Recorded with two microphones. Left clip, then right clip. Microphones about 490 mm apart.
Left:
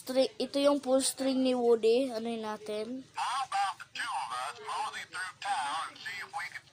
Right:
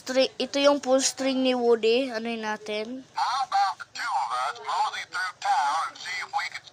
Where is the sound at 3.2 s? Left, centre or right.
Right.